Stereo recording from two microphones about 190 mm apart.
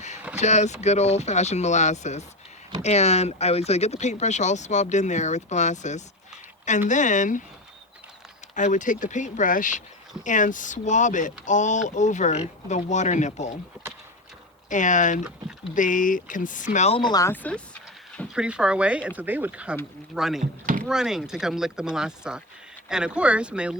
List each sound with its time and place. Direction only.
0.3 s speech: 35° left (ahead or behind)
8.5 s speech: 40° left (ahead or behind)
14.7 s speech: 40° left (ahead or behind)
17.0 s speech: 20° left (ahead or behind)
18.3 s speech: 5° right (ahead or behind)
20.4 s speech: 45° right (ahead or behind)
20.8 s speech: 5° right (ahead or behind)